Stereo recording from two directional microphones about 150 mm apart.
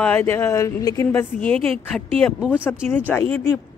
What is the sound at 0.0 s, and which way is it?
Speech, 15° left (ahead or behind).